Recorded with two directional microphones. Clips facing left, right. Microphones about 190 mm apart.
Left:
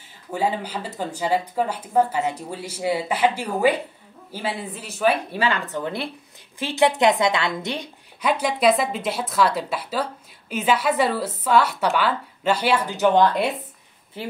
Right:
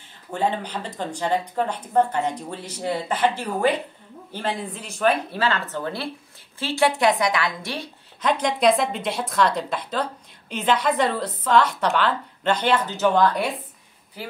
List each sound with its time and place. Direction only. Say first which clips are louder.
0.3 s speech: even; 5° left (ahead or behind); by 14.3 s 25° left (ahead or behind)